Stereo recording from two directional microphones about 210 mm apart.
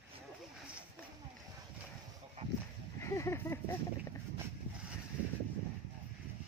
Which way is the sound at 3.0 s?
15° left (ahead or behind).